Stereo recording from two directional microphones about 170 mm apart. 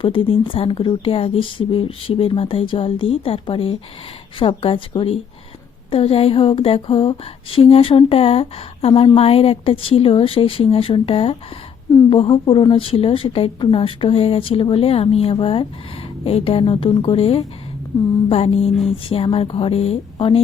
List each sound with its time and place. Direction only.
0.0 s speech: 30° left (ahead or behind)